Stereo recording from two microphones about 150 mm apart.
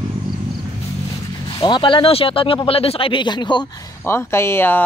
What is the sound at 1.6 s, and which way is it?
Speech, 30° left (ahead or behind).